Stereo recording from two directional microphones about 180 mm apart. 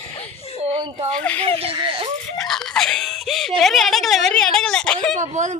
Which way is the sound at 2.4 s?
Centre (ahead or behind).